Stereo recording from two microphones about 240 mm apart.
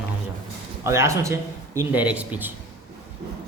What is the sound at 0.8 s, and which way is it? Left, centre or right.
A man's voice, centre.